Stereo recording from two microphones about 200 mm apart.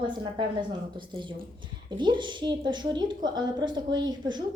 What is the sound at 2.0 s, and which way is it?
A woman's voice, 25° right (ahead or behind).